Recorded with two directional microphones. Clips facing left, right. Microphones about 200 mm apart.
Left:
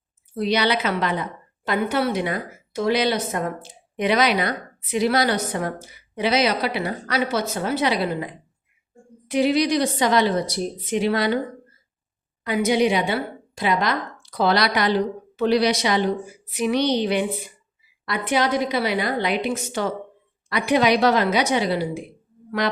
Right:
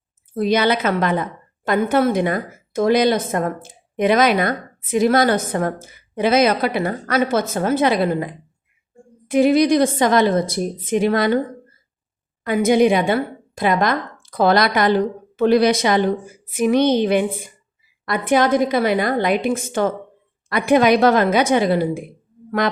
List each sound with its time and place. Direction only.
0.3 s a woman's voice: 50° right (ahead or behind)
12.5 s a woman's voice: 50° right (ahead or behind)